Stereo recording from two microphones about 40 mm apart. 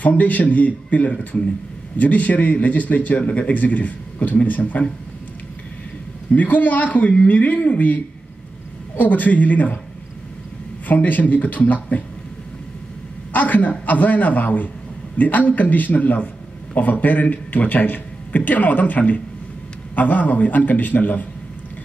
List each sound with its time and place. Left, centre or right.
0.0 s speech: left
6.3 s speech: left
10.9 s speech: left
13.3 s speech: left